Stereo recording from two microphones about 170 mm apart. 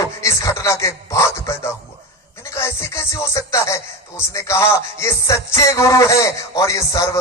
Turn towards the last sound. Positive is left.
turn(degrees=20)  # may be behind; listen again after turning